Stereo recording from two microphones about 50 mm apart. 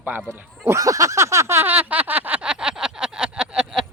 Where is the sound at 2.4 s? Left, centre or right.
Centre.